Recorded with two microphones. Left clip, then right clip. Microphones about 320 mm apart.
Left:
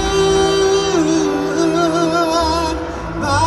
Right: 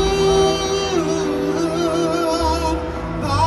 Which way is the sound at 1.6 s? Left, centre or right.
Left.